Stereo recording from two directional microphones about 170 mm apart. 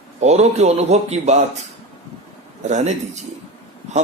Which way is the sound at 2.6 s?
45° right (ahead or behind).